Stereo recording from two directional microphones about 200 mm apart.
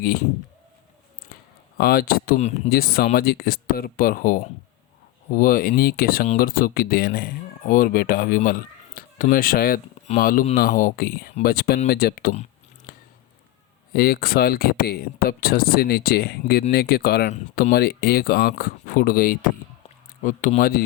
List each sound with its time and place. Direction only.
1.8 s speech: 50° left (ahead or behind)
13.9 s speech: 50° left (ahead or behind)